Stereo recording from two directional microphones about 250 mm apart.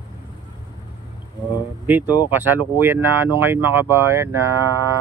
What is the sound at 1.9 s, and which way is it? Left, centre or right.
Speech, centre.